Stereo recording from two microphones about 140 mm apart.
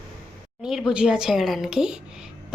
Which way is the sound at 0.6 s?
5° right (ahead or behind).